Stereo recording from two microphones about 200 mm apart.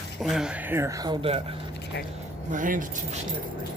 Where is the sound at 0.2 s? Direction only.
Centre (ahead or behind); by 1.4 s 25° right (ahead or behind).